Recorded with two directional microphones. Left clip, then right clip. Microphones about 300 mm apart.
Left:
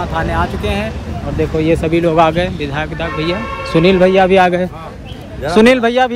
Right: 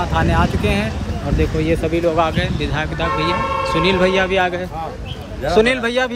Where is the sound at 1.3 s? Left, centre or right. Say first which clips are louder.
Left 5 dB; centre.